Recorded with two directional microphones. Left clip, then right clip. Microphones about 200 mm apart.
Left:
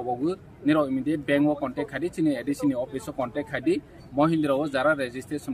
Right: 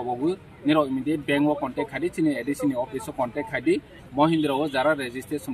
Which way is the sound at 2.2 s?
25° left (ahead or behind).